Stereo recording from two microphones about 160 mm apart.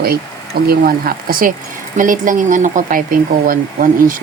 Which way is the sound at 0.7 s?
65° right (ahead or behind).